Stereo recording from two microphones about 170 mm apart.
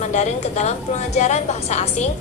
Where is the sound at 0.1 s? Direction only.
45° left (ahead or behind).